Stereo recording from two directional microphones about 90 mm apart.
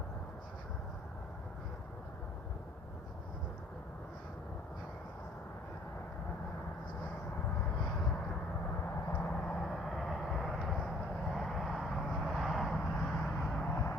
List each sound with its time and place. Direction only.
9.1 s vehicle: 10° left (ahead or behind)
13.7 s vehicle: 25° left (ahead or behind)